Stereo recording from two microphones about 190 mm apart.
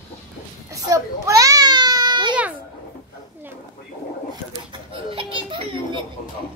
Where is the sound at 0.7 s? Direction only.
15° right (ahead or behind).